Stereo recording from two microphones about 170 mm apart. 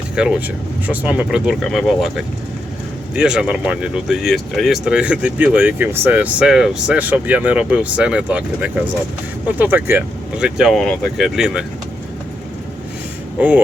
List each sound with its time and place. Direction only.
0.2 s speech: 5° right (ahead or behind)